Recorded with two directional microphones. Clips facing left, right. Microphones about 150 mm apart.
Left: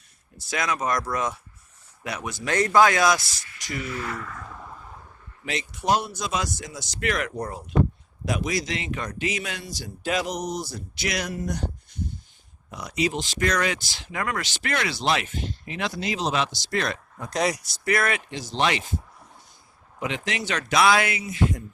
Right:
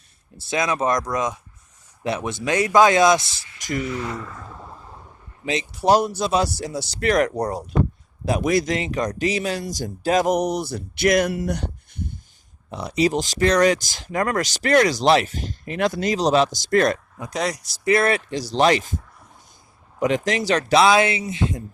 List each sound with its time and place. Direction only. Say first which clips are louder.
0.3 s speech: right 5 dB; 25° right (ahead or behind)
5.7 s speech: right 7 dB; 35° right (ahead or behind)
8.4 s speech: right 10 dB; 50° right (ahead or behind)
11.3 s speech: right 4 dB; 70° right (ahead or behind)
12.7 s speech: right 6 dB; 30° right (ahead or behind); by 17.0 s 45° right (ahead or behind)
17.3 s speech: even; 5° left (ahead or behind)
17.8 s speech: right 6 dB; 30° right (ahead or behind)
20.0 s speech: right 8 dB; 40° right (ahead or behind); by 21.6 s 25° right (ahead or behind)